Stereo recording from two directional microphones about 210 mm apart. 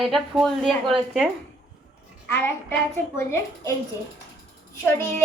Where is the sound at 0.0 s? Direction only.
Centre (ahead or behind).